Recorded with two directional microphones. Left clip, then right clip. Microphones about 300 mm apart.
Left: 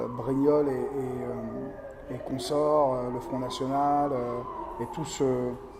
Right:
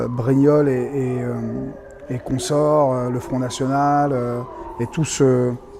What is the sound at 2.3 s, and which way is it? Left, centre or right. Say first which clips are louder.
Speech: right 7 dB; right.